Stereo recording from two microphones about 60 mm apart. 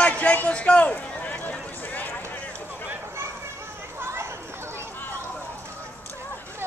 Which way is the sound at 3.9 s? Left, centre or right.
Right.